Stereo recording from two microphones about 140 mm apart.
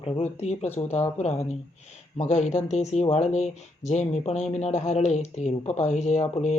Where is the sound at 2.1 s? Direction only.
55° left (ahead or behind).